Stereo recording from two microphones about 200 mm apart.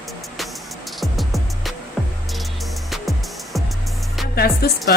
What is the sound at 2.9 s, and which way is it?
Music, centre (ahead or behind).